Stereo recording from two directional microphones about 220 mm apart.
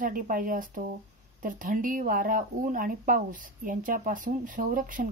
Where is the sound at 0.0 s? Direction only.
40° right (ahead or behind).